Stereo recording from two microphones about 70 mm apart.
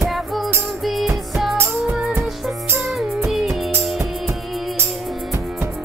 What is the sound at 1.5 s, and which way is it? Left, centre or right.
Music, right.